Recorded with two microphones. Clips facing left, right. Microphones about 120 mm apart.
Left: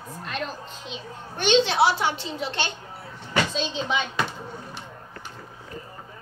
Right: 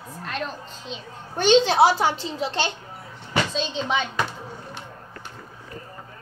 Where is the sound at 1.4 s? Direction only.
40° right (ahead or behind).